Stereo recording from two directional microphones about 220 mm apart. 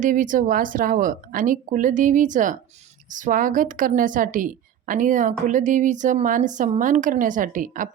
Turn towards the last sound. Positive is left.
turn(degrees=-35)  # may be behind; listen again after turning